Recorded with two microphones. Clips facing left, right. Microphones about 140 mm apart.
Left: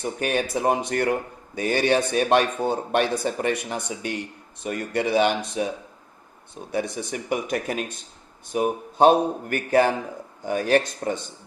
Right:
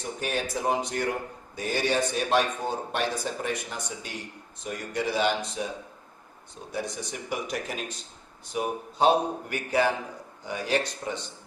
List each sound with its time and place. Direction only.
0.0 s speech: 65° left (ahead or behind)
6.7 s speech: 60° left (ahead or behind)